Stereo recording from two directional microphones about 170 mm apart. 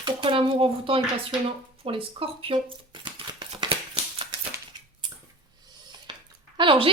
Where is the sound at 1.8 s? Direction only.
35° right (ahead or behind).